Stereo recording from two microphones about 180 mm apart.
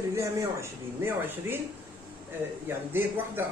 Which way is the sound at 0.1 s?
15° right (ahead or behind).